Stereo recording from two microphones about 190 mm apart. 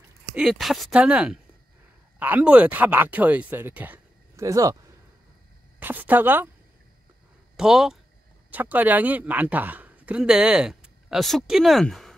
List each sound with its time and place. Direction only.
0.4 s speech: centre (ahead or behind); by 4.7 s 15° right (ahead or behind)
5.8 s speech: 10° right (ahead or behind)
7.5 s speech: 5° right (ahead or behind)